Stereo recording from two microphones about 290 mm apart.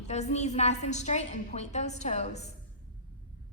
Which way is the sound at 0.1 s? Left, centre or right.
Left.